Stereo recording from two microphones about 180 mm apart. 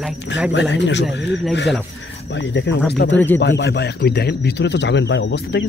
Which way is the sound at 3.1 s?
10° left (ahead or behind).